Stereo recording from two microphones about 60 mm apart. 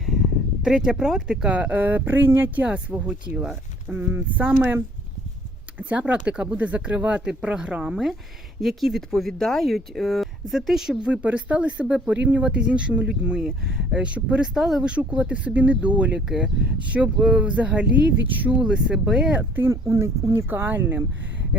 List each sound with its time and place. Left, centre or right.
0.6 s speech: centre
1.5 s speech: right
2.6 s speech: right
3.8 s speech: right
5.9 s speech: right
8.6 s speech: centre
11.2 s speech: right
14.5 s speech: centre
14.8 s speech: right
16.3 s speech: centre
16.8 s speech: right
18.7 s speech: centre
19.7 s speech: right
20.5 s speech: right